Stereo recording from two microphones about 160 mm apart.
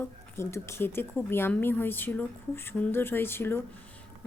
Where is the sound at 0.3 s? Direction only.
15° left (ahead or behind).